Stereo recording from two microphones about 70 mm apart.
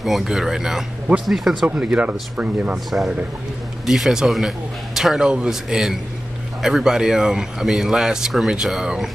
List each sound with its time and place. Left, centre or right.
0.0 s a man's voice: centre
1.7 s speech: centre
2.7 s a man's voice: centre